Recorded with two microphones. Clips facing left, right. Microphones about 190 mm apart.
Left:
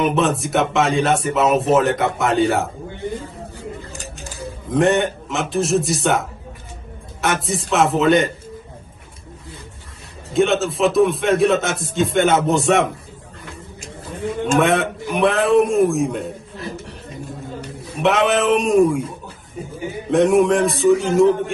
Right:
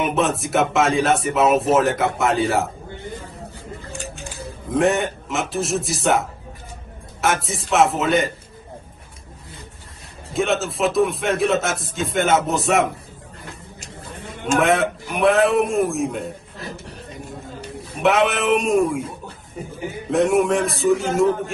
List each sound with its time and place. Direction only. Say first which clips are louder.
0.0 s speech: left 3 dB; centre (ahead or behind)
3.9 s a sound: right 2 dB; 40° left (ahead or behind)
4.6 s speech: left 2 dB; centre (ahead or behind)
10.3 s speech: left 4 dB; centre (ahead or behind)
14.6 s speech: right 1 dB; centre (ahead or behind)
18.0 s speech: left 2 dB; centre (ahead or behind)
20.1 s speech: left 3 dB; centre (ahead or behind)